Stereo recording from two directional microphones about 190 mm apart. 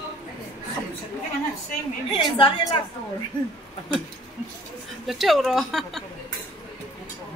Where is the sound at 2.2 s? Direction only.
20° left (ahead or behind).